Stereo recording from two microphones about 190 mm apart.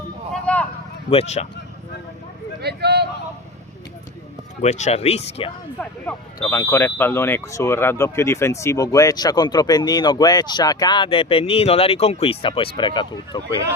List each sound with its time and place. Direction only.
0.5 s a sound: 5° left (ahead or behind)
1.1 s speech: 35° left (ahead or behind)
2.6 s speech: 60° right (ahead or behind)
4.6 s speech: 35° left (ahead or behind)
5.8 s speech: 10° left (ahead or behind)